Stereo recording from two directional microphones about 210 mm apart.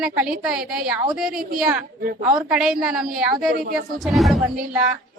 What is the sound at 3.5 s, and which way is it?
Speech, 45° right (ahead or behind).